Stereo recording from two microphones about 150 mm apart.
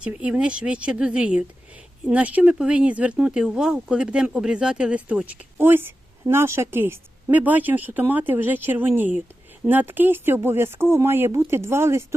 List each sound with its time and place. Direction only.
0.0 s speech: 10° right (ahead or behind)